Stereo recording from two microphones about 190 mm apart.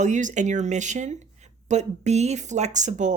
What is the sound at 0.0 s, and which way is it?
Speech, 40° right (ahead or behind).